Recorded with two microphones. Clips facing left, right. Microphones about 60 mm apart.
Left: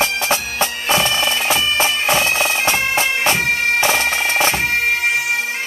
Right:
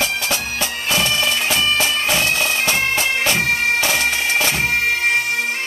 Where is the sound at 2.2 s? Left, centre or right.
Centre.